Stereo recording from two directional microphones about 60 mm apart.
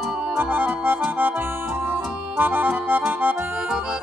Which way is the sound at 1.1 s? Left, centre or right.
Right.